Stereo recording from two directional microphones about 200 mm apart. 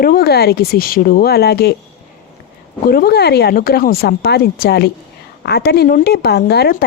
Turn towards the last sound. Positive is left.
turn(degrees=50)  # may be behind; listen again after turning